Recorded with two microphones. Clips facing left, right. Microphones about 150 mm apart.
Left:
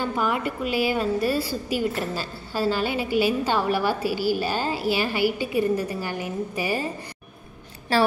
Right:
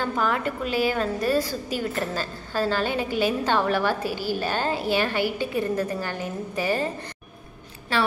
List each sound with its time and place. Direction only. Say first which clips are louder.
0.0 s a woman's voice: even; 10° left (ahead or behind)
7.9 s a woman's voice: left 4 dB; 35° left (ahead or behind)